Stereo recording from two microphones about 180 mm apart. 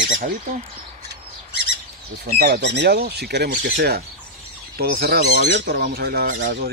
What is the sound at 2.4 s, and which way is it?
Speech, 70° right (ahead or behind).